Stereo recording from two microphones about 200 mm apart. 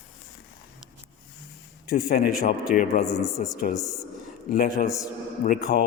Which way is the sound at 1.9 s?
45° left (ahead or behind).